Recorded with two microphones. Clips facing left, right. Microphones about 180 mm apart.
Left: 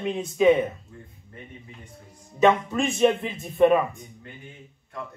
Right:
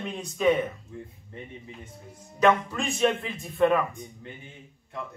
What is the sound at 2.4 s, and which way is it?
A man's voice, 25° left (ahead or behind).